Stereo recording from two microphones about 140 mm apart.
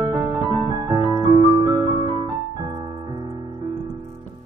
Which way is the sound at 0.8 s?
30° right (ahead or behind).